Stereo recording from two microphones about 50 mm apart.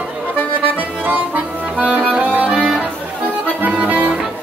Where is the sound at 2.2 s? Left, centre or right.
Right.